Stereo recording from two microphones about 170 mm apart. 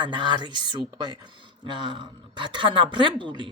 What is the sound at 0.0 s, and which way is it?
Speech, 25° right (ahead or behind).